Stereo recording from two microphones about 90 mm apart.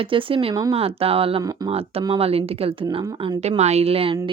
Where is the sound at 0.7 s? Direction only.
90° right.